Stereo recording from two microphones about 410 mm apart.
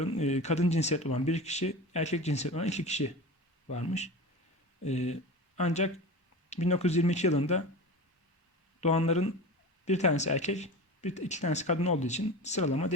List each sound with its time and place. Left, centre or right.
0.0 s speech: centre
8.8 s speech: centre